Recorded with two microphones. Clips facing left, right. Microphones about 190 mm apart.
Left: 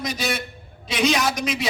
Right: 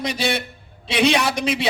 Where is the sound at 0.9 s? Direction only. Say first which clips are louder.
Right 3 dB; 30° right (ahead or behind).